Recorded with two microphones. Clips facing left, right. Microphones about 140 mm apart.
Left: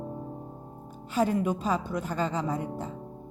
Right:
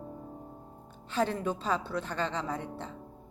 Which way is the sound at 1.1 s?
10° left (ahead or behind).